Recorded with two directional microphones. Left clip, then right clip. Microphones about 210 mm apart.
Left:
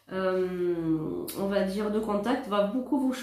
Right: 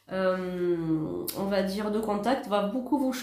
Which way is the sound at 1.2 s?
40° right (ahead or behind).